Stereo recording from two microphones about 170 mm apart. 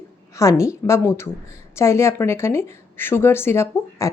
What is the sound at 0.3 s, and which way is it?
Speech, 20° left (ahead or behind).